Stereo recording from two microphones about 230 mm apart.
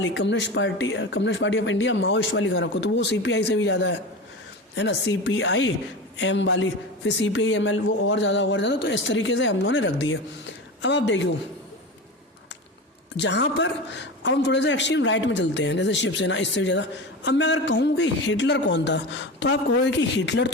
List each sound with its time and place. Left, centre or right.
0.0 s a man's voice: left
13.1 s a man's voice: left